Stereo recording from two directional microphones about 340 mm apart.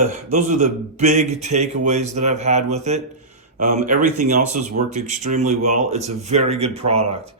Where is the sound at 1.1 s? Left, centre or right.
Centre.